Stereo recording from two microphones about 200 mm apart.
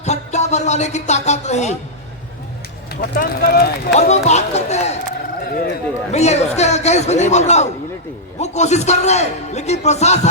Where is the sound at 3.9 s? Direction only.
35° left (ahead or behind).